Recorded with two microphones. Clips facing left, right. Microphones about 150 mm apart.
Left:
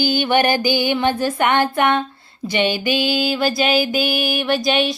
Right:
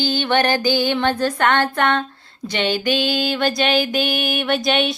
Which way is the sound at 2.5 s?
10° left (ahead or behind).